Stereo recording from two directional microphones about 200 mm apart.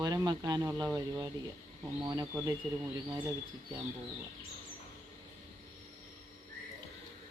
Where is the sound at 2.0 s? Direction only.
20° right (ahead or behind).